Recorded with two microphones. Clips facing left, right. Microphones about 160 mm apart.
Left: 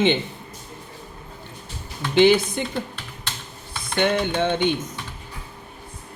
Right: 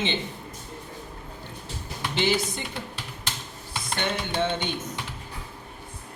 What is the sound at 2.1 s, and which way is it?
Speech, 55° left (ahead or behind).